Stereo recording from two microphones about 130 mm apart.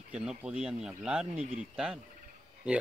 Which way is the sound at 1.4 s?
70° right (ahead or behind).